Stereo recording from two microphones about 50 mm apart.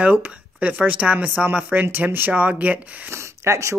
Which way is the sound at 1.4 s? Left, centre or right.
Right.